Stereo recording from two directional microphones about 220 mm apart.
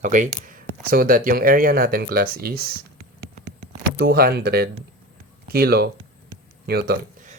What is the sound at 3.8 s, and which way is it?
Speech, 45° right (ahead or behind).